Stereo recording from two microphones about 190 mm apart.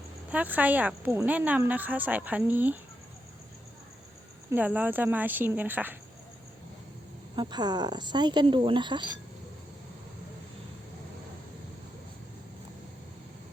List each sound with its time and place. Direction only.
0.3 s speech: 10° right (ahead or behind)
4.5 s speech: 10° right (ahead or behind)
7.3 s speech: 20° right (ahead or behind)